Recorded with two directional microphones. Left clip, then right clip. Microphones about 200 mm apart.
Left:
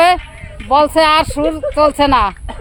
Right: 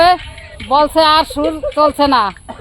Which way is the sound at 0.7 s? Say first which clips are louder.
Even; 10° right (ahead or behind).